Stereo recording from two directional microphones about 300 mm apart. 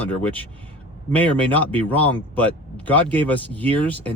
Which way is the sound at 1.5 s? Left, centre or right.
Centre.